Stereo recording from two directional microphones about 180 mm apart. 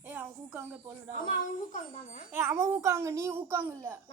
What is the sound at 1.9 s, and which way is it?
Speech, 40° left (ahead or behind).